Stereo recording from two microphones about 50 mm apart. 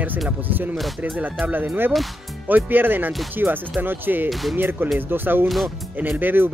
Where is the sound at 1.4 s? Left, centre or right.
Right.